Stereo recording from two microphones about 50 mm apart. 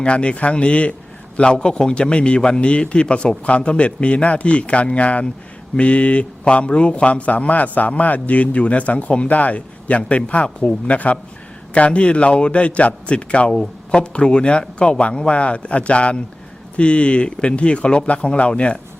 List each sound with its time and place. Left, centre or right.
0.0 s a man's voice: left